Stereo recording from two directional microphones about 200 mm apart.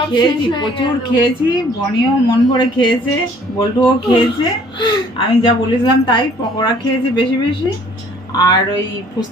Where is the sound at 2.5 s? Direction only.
25° left (ahead or behind).